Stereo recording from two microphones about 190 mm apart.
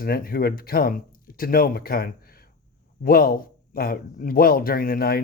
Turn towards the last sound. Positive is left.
turn(degrees=50)  # may be behind; listen again after turning